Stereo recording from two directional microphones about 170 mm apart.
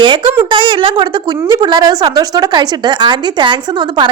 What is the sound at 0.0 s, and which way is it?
A woman's voice, 30° right (ahead or behind).